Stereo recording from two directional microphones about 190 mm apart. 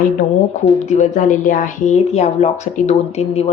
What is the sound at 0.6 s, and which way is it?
Speech, 40° left (ahead or behind).